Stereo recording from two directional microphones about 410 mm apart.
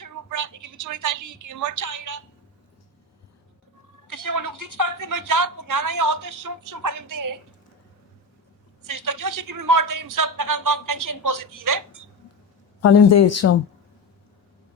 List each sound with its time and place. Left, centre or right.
0.0 s a woman's voice: right
4.1 s a woman's voice: right
8.8 s speech: right
12.8 s speech: left